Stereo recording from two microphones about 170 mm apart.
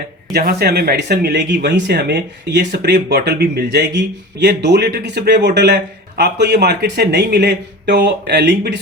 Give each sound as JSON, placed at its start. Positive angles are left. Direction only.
{"t": 0.3, "sound": "speech", "side_deg": -65}